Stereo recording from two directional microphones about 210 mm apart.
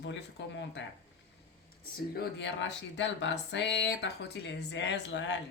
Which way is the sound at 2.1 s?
50° left (ahead or behind).